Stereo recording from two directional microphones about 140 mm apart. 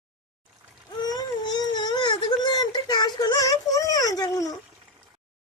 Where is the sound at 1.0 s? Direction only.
30° left (ahead or behind).